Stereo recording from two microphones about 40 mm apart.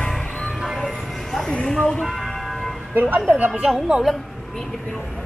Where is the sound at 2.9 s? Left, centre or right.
Right.